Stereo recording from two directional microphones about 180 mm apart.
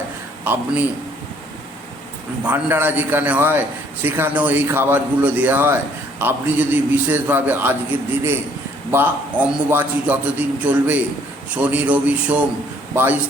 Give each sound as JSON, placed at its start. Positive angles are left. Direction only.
{"t": 0.4, "sound": "a man's voice", "side_deg": -10}
{"t": 2.4, "sound": "a man's voice", "side_deg": -10}